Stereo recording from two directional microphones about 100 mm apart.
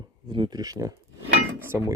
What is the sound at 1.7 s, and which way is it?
Speech, 25° right (ahead or behind).